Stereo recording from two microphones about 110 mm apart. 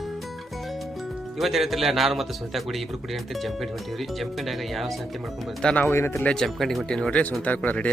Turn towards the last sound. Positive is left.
turn(degrees=15)  # may be behind; listen again after turning